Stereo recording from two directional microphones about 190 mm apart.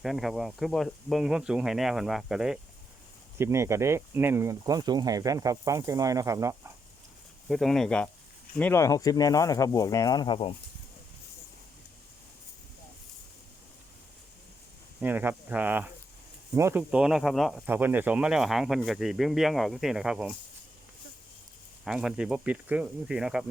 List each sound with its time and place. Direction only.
0.0 s speech: centre (ahead or behind)
3.3 s speech: 15° right (ahead or behind)
7.4 s speech: centre (ahead or behind); by 10.5 s 25° left (ahead or behind)
15.0 s speech: 10° right (ahead or behind)
21.8 s speech: 5° right (ahead or behind)